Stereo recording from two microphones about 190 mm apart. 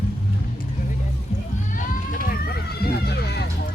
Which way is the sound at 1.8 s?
45° left (ahead or behind).